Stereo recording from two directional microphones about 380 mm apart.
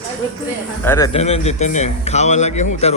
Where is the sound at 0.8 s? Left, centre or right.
Centre.